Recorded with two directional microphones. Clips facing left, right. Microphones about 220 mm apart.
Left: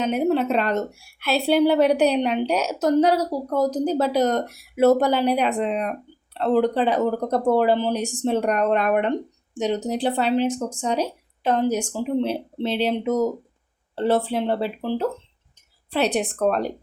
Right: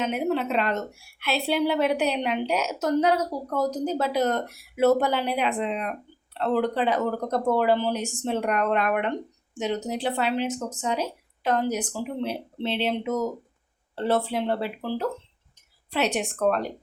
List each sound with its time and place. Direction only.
0.0 s a woman's voice: 40° left (ahead or behind)
12.6 s a woman's voice: 40° left (ahead or behind)
13.9 s a woman's voice: 30° left (ahead or behind)